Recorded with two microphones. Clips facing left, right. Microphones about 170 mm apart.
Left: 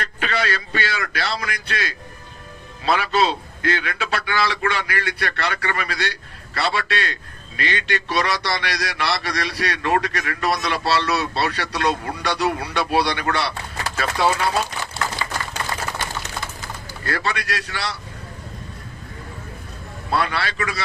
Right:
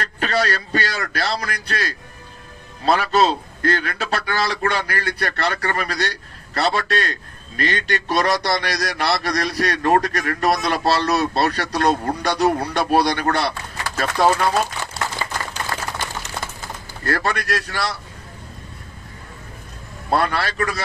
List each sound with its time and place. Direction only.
0.0 s a man's voice: 40° right (ahead or behind)
17.0 s a man's voice: 50° right (ahead or behind)
20.1 s a man's voice: 45° right (ahead or behind)